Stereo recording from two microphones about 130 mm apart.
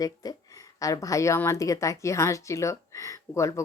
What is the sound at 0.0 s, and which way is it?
A woman's voice, 30° left (ahead or behind).